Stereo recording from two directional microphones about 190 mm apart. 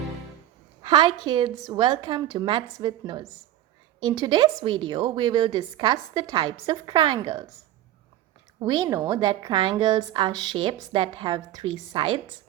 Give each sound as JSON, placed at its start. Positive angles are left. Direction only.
{"t": 0.8, "sound": "a woman's voice", "side_deg": -25}
{"t": 8.5, "sound": "a woman's voice", "side_deg": -20}